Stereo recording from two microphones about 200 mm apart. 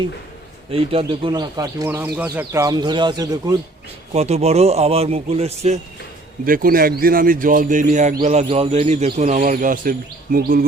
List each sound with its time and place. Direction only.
0.7 s speech: 30° right (ahead or behind)
4.1 s speech: 30° right (ahead or behind)
6.4 s speech: 45° right (ahead or behind)